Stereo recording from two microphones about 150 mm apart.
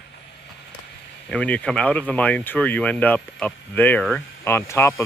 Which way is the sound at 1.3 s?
5° left (ahead or behind).